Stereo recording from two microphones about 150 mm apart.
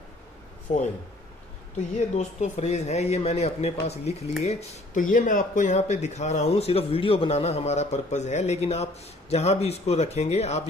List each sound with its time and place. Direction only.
0.7 s speech: 50° left (ahead or behind)
2.1 s speech: 50° left (ahead or behind)